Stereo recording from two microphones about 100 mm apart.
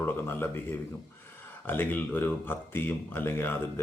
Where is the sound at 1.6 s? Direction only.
20° left (ahead or behind).